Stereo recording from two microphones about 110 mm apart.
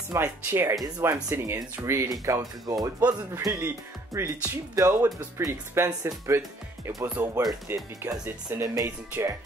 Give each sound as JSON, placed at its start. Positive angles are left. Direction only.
{"t": 0.2, "sound": "speech", "side_deg": -20}
{"t": 0.8, "sound": "speech", "side_deg": -35}
{"t": 1.3, "sound": "speech", "side_deg": -20}
{"t": 2.6, "sound": "speech", "side_deg": -35}
{"t": 7.0, "sound": "speech", "side_deg": -20}